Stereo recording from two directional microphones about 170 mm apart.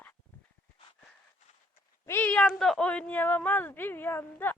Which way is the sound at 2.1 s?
10° left (ahead or behind).